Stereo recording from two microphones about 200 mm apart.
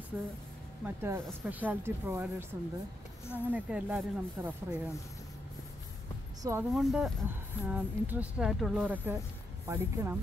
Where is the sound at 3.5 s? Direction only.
5° right (ahead or behind).